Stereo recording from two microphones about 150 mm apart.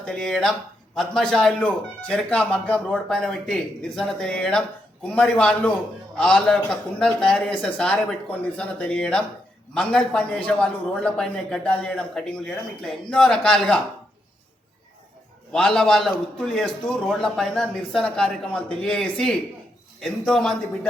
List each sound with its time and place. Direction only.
0.0 s a man's voice: 5° left (ahead or behind)
15.5 s a man's voice: 5° left (ahead or behind)